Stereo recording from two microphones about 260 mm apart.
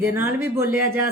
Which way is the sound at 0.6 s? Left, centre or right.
Left.